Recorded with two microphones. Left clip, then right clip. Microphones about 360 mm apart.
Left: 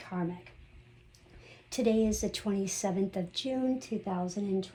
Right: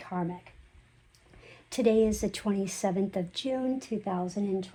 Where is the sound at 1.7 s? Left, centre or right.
Right.